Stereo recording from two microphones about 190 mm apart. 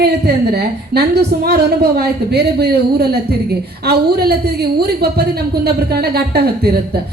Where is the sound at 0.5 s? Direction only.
60° right (ahead or behind).